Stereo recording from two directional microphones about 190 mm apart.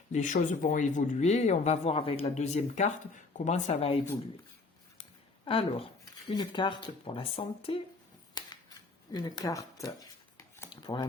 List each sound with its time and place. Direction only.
0.1 s speech: 40° left (ahead or behind)
5.5 s speech: 30° left (ahead or behind)
8.4 s scissors: 25° left (ahead or behind)
9.1 s speech: 20° left (ahead or behind)
10.3 s a sound: 20° left (ahead or behind)